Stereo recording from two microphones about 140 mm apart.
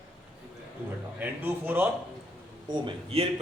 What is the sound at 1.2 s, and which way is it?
Speech, 15° right (ahead or behind).